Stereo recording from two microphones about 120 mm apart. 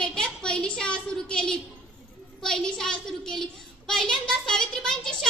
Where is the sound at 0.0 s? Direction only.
5° left (ahead or behind).